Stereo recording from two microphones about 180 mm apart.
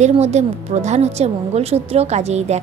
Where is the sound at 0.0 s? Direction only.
40° right (ahead or behind).